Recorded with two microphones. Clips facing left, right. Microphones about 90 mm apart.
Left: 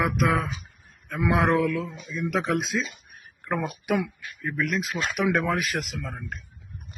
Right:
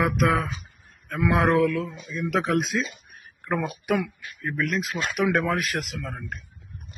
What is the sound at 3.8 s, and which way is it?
Speech, centre (ahead or behind).